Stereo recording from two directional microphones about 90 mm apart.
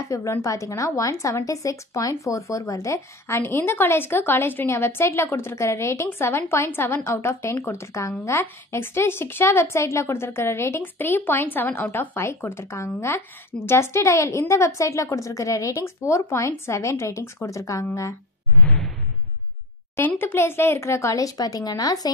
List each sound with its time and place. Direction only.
0.0 s a woman's voice: 35° left (ahead or behind)
18.6 s whoosh: 10° left (ahead or behind)
20.0 s speech: 25° left (ahead or behind); by 22.1 s 45° left (ahead or behind)